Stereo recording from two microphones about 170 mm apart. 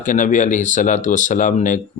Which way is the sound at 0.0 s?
50° left (ahead or behind).